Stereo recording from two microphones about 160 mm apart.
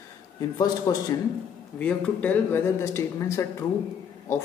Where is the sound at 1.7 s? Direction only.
10° left (ahead or behind).